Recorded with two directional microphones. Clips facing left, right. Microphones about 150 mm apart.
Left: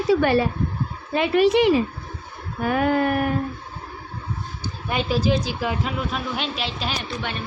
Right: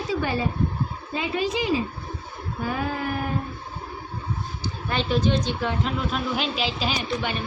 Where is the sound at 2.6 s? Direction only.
65° left (ahead or behind).